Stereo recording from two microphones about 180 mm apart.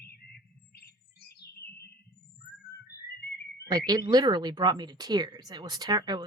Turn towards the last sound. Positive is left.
turn(degrees=-25)  # may be behind; listen again after turning